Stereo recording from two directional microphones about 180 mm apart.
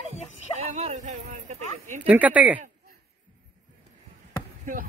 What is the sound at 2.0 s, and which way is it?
Speech, 10° right (ahead or behind).